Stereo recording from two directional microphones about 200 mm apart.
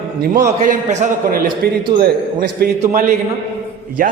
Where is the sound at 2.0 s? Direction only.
50° right (ahead or behind).